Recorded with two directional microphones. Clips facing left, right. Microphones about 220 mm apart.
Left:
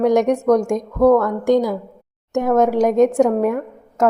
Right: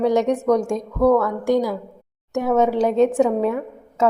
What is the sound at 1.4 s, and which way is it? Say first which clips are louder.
A woman's voice: left 3 dB; 20° left (ahead or behind).